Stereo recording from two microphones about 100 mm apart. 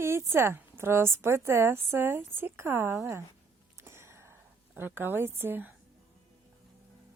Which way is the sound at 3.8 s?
25° right (ahead or behind).